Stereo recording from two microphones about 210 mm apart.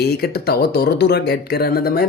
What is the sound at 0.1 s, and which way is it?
Speech, 50° left (ahead or behind).